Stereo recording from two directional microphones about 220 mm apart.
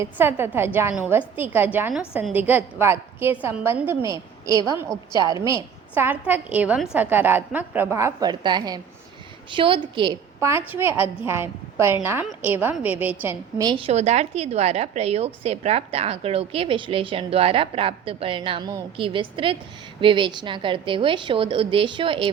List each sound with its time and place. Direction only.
0.0 s a woman's voice: 10° right (ahead or behind)